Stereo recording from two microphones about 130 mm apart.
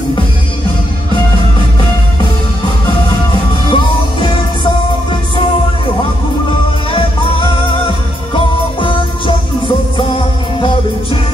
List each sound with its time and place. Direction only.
3.7 s music: 40° left (ahead or behind)
6.9 s music: 40° left (ahead or behind)